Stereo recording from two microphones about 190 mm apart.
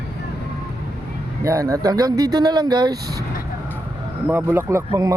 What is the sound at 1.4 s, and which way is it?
Speech, 15° right (ahead or behind).